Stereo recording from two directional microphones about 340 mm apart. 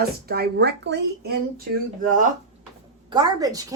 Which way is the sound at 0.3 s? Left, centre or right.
Right.